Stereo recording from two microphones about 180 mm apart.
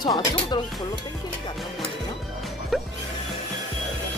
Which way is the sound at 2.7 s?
Centre (ahead or behind).